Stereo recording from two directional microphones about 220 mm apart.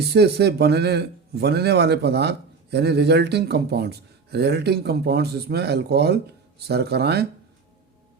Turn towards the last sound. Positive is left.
turn(degrees=-50)  # may be behind; listen again after turning